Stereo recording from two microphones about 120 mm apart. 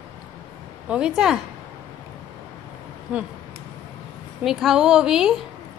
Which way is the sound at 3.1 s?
10° right (ahead or behind).